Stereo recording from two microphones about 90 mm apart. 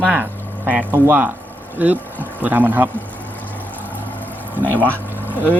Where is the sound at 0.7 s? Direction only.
20° right (ahead or behind).